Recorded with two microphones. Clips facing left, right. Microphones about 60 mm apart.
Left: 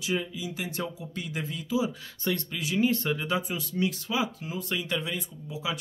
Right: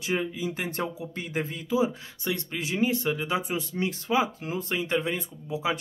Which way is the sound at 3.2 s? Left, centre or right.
Right.